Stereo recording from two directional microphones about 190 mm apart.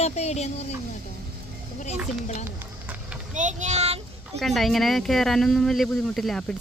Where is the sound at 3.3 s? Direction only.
40° right (ahead or behind).